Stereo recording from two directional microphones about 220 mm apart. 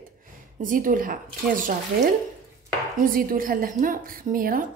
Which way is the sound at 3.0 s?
40° right (ahead or behind).